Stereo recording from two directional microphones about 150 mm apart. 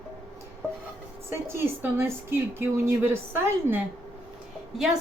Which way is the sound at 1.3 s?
15° right (ahead or behind).